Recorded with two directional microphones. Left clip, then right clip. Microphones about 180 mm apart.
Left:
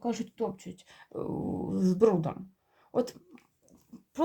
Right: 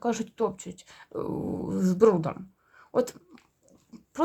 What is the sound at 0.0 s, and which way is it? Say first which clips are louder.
Speech: right 5 dB; 35° right (ahead or behind).